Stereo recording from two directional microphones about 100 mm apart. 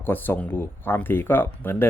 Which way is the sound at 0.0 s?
20° left (ahead or behind).